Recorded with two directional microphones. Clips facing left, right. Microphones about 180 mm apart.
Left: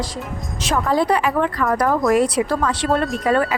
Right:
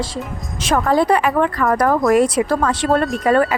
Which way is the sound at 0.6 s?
50° right (ahead or behind).